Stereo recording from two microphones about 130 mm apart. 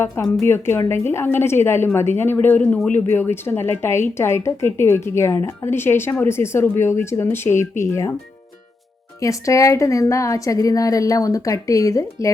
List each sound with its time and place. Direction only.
0.4 s a woman's voice: 20° left (ahead or behind)
9.2 s a woman's voice: 25° left (ahead or behind)